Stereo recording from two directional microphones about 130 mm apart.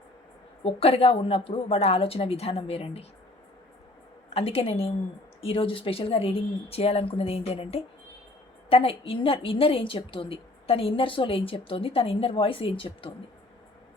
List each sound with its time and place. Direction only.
0.6 s a woman's voice: 50° left (ahead or behind)
4.4 s a woman's voice: 50° left (ahead or behind)